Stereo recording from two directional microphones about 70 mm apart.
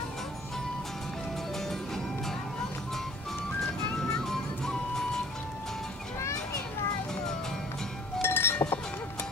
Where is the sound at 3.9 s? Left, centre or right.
Centre.